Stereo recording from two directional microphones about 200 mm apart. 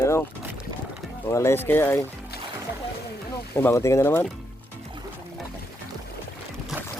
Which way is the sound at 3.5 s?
10° left (ahead or behind).